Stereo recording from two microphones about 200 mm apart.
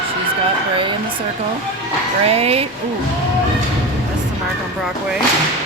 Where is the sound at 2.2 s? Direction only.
30° right (ahead or behind).